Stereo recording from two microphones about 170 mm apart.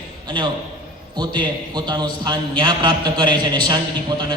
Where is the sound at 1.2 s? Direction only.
25° right (ahead or behind).